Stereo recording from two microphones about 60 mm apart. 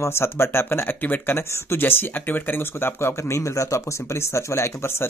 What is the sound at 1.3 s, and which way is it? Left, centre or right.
Speech, left.